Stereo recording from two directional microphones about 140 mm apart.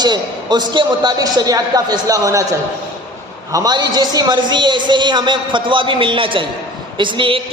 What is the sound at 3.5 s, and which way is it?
A man's voice, 25° right (ahead or behind).